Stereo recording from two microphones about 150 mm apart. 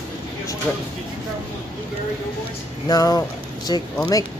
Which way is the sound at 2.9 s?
25° left (ahead or behind).